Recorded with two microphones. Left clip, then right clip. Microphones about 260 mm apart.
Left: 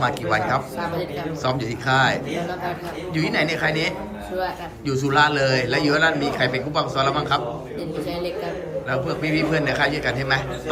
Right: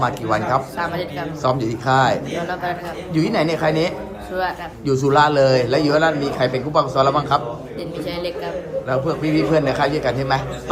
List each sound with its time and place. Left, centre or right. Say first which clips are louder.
0.0 s a man's voice: right 1 dB; centre
8.9 s a man's voice: right 3 dB; centre